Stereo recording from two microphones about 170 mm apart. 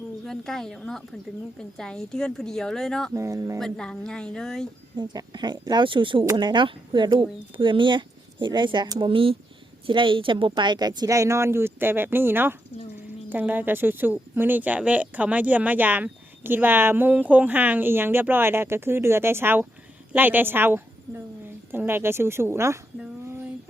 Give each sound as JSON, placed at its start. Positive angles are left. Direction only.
{"t": 0.3, "sound": "a woman's voice", "side_deg": 5}
{"t": 3.1, "sound": "speech", "side_deg": -20}
{"t": 3.6, "sound": "a woman's voice", "side_deg": 5}
{"t": 4.9, "sound": "speech", "side_deg": -25}
{"t": 23.0, "sound": "a sound", "side_deg": -10}